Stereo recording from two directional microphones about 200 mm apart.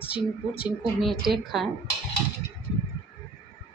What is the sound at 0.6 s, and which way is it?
Speech, centre (ahead or behind).